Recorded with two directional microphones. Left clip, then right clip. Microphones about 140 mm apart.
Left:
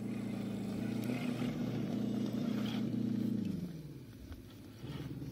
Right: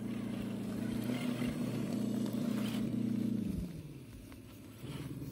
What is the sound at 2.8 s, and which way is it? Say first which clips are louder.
Vehicle: right 1 dB; 50° right (ahead or behind).